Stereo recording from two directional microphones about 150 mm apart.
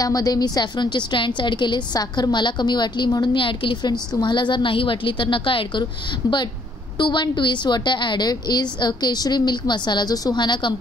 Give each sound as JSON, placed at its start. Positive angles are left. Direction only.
{"t": 0.0, "sound": "a woman's voice", "side_deg": 25}
{"t": 7.0, "sound": "a woman's voice", "side_deg": 30}